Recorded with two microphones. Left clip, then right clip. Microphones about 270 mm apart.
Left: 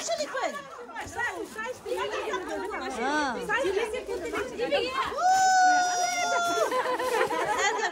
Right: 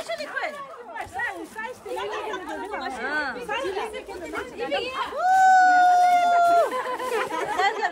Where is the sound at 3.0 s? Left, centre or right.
Centre.